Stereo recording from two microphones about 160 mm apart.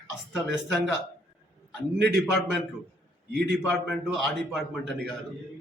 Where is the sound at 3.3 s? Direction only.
90° right.